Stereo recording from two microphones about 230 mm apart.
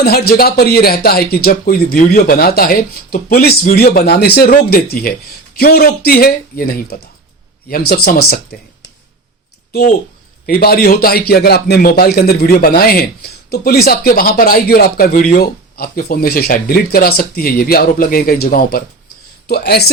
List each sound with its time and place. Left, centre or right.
0.0 s speech: left
10.4 s a man's voice: left
19.5 s a man's voice: left